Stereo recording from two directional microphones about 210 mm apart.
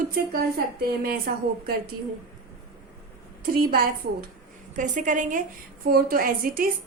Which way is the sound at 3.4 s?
45° right (ahead or behind).